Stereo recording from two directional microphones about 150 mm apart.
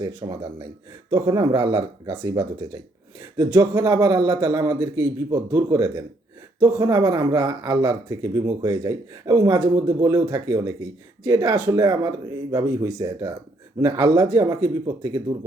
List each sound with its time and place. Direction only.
0.0 s speech: 30° right (ahead or behind)